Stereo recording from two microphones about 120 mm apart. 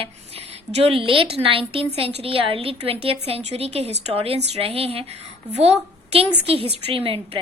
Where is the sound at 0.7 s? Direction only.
55° right (ahead or behind).